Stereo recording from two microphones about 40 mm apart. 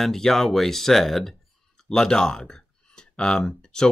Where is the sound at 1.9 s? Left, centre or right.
Centre.